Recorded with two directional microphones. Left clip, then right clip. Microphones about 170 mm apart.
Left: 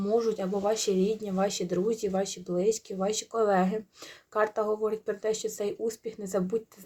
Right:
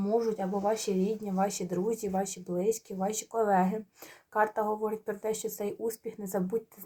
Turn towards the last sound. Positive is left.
turn(degrees=25)  # may be behind; listen again after turning